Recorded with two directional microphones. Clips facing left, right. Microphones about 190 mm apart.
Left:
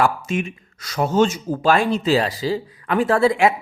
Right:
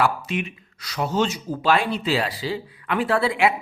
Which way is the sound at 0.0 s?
45° left (ahead or behind).